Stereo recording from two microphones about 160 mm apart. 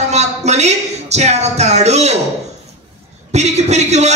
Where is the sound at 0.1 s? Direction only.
45° right (ahead or behind).